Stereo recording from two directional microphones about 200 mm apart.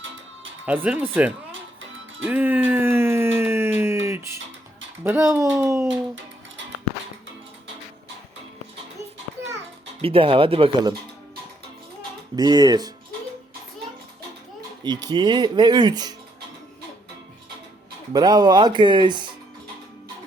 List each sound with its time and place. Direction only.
0.6 s speech: 10° right (ahead or behind)
2.2 s a sound: 10° right (ahead or behind)
5.0 s speech: 10° right (ahead or behind)
10.0 s speech: 30° right (ahead or behind)
12.4 s speech: 20° right (ahead or behind)
14.8 s speech: 20° right (ahead or behind)
18.1 s speech: 20° right (ahead or behind)